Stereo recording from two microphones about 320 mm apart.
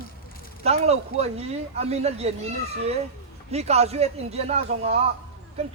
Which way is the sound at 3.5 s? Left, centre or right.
Centre.